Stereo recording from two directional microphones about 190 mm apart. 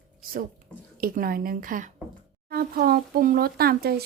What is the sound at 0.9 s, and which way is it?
Speech, 50° right (ahead or behind).